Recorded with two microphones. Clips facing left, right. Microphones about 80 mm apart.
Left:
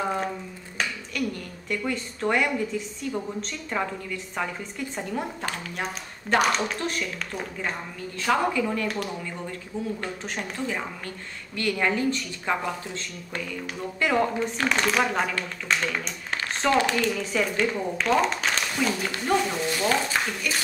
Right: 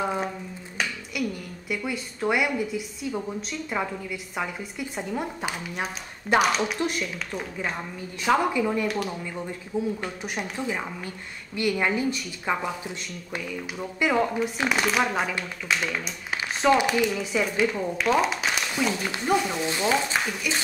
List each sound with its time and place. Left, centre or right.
0.0 s a sound: centre
1.1 s a woman's voice: centre
6.8 s a woman's voice: centre
8.2 s a woman's voice: centre
8.8 s speech: centre
9.7 s a woman's voice: centre